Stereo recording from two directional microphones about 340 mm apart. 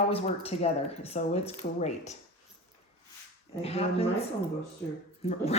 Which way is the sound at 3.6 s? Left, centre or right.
Centre.